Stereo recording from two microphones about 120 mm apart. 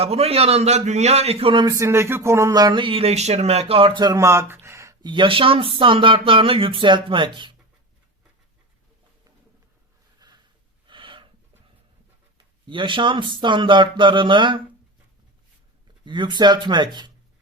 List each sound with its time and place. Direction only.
0.0 s a man's voice: 60° right (ahead or behind)
1.6 s speech: 25° right (ahead or behind); by 4.1 s 45° right (ahead or behind)
4.1 s speech: 25° right (ahead or behind)
5.0 s speech: 40° right (ahead or behind)
10.2 s a sound: 35° right (ahead or behind)
10.8 s gasp: 45° right (ahead or behind)
12.6 s speech: 40° right (ahead or behind)
16.0 s speech: 40° right (ahead or behind)